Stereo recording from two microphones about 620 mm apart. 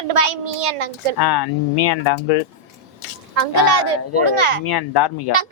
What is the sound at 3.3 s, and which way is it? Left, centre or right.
Speech, right.